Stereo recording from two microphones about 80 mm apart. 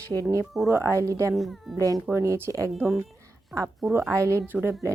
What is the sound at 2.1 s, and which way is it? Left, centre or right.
Speech, right.